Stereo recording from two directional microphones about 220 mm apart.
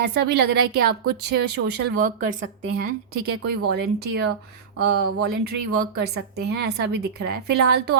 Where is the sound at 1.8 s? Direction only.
40° right (ahead or behind).